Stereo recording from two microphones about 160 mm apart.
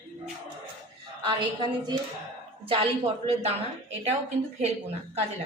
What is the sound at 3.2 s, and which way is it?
Speech, 40° right (ahead or behind).